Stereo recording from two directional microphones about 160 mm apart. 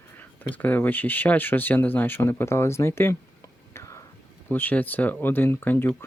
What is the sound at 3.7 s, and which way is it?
Whispering, 20° left (ahead or behind).